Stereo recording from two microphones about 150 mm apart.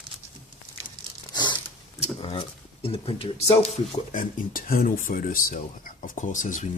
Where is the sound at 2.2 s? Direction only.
35° left (ahead or behind).